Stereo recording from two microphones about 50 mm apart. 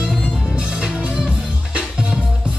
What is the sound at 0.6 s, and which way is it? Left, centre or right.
Music, centre.